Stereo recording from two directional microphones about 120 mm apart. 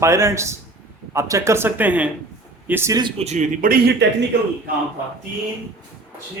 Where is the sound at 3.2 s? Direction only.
65° right (ahead or behind).